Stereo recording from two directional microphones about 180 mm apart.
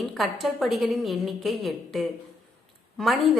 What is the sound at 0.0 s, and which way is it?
Speech, centre (ahead or behind).